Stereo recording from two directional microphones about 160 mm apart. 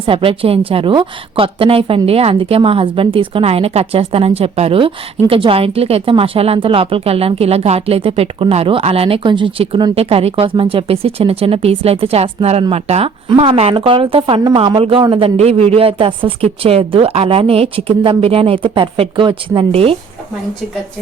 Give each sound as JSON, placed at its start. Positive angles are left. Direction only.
{"t": 0.0, "sound": "a woman's voice", "side_deg": -35}